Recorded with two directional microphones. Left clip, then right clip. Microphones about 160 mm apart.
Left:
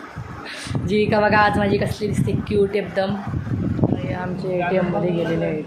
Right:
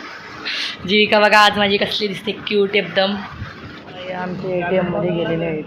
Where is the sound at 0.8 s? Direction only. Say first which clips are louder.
Right 4 dB; 10° left (ahead or behind).